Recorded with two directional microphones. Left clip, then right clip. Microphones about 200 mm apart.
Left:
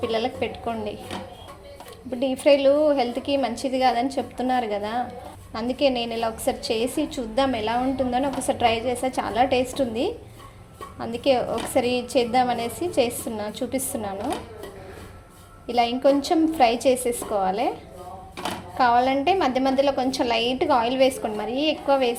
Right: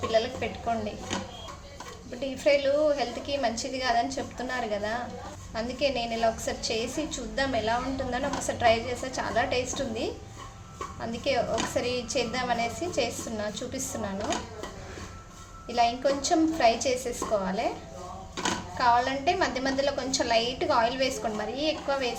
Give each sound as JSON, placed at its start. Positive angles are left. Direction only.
{"t": 0.1, "sound": "a woman's voice", "side_deg": 35}
{"t": 2.2, "sound": "a woman's voice", "side_deg": 30}
{"t": 11.2, "sound": "a woman's voice", "side_deg": 30}
{"t": 15.6, "sound": "a woman's voice", "side_deg": 30}
{"t": 18.8, "sound": "a woman's voice", "side_deg": 30}